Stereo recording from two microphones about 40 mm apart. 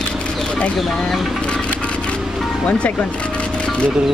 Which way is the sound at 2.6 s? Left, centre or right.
Left.